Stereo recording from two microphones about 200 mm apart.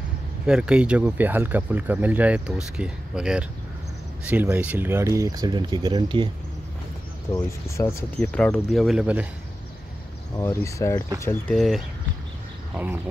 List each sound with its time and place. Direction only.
0.5 s speech: 5° right (ahead or behind); by 6.3 s 20° right (ahead or behind)
7.3 s speech: 15° left (ahead or behind)
8.2 s speech: 5° left (ahead or behind)
10.3 s speech: 15° left (ahead or behind)
11.5 s speech: centre (ahead or behind)